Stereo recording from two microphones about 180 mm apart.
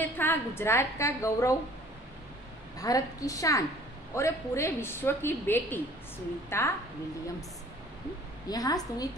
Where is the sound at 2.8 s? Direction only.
20° left (ahead or behind).